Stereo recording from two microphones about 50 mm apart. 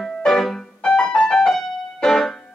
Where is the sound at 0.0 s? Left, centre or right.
Centre.